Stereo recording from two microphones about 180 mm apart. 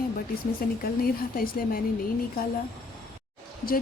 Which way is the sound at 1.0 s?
55° left (ahead or behind).